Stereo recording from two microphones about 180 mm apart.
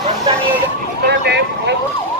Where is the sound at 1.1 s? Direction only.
70° right (ahead or behind).